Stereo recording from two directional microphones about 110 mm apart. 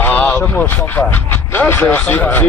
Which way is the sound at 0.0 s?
15° left (ahead or behind).